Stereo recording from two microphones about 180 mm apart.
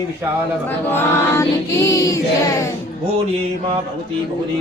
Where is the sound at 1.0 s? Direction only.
15° left (ahead or behind).